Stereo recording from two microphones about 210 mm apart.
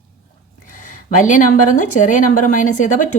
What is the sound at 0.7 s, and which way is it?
Speech, 40° left (ahead or behind).